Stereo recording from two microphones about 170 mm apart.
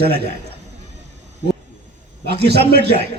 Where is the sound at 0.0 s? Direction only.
70° right (ahead or behind).